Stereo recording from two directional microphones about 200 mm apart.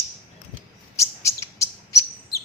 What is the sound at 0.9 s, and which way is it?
Chirp, 15° left (ahead or behind).